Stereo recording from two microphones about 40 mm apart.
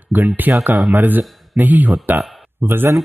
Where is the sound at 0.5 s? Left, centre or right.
Right.